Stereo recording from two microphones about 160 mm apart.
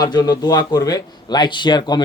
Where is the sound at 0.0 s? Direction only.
25° left (ahead or behind).